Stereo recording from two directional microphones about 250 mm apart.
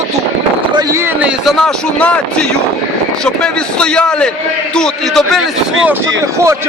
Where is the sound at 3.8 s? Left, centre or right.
Centre.